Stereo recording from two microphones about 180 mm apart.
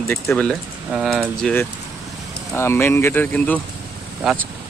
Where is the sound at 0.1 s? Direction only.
10° left (ahead or behind).